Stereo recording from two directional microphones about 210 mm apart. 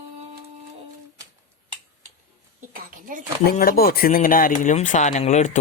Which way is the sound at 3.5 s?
45° left (ahead or behind).